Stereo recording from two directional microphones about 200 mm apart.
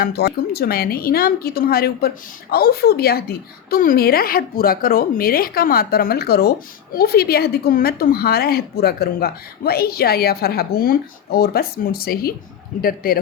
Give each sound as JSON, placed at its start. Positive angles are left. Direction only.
{"t": 0.0, "sound": "a woman's voice", "side_deg": 55}